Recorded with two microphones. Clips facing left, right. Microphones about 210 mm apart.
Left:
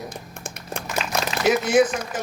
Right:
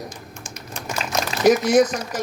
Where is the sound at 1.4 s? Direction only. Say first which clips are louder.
Right 3 dB; 40° right (ahead or behind).